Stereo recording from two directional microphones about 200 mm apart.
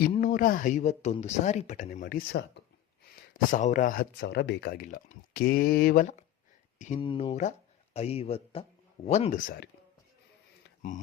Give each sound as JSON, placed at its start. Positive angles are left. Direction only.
{"t": 0.1, "sound": "speech", "side_deg": 40}
{"t": 3.5, "sound": "speech", "side_deg": 40}
{"t": 7.0, "sound": "speech", "side_deg": 25}